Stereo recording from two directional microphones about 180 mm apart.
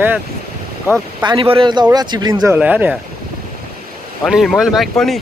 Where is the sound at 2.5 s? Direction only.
10° right (ahead or behind).